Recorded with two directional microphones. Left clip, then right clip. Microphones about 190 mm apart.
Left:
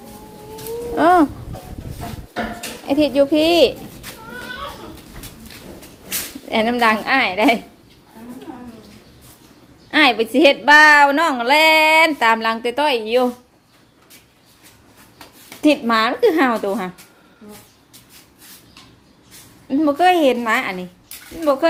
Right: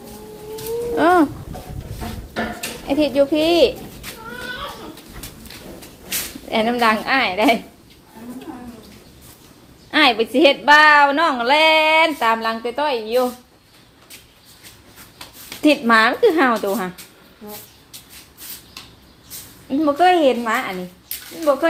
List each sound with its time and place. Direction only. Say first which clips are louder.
0.9 s speech: left 2 dB; 15° left (ahead or behind)
2.8 s a woman's voice: left 1 dB; 20° left (ahead or behind)
6.5 s a woman's voice: left 1 dB; 20° left (ahead or behind)
9.9 s a woman's voice: left 1 dB; 15° left (ahead or behind); by 13.3 s 30° left (ahead or behind)
15.4 s a woman's voice: right 1 dB; centre (ahead or behind)
19.6 s a woman's voice: even; 10° left (ahead or behind)